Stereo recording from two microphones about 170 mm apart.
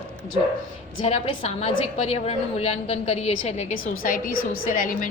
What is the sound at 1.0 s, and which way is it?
A woman's voice, 35° left (ahead or behind).